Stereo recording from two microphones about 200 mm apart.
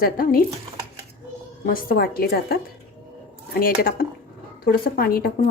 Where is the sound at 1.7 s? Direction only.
45° left (ahead or behind).